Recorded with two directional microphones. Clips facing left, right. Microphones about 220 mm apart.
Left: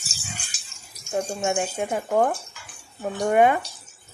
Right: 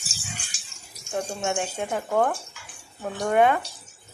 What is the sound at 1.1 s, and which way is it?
Speech, 5° left (ahead or behind).